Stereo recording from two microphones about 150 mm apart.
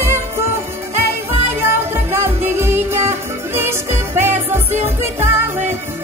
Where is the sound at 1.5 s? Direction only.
15° right (ahead or behind).